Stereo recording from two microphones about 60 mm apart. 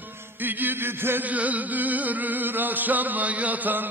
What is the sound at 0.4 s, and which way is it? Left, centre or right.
Music, right.